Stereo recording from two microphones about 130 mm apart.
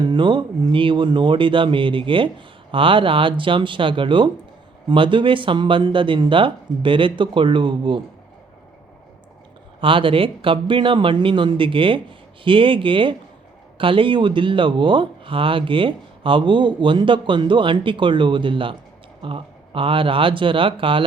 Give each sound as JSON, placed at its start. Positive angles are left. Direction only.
{"t": 0.0, "sound": "speech", "side_deg": -40}
{"t": 9.8, "sound": "speech", "side_deg": -40}